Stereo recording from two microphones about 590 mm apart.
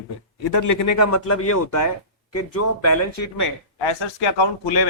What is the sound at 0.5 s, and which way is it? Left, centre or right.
Speech, left.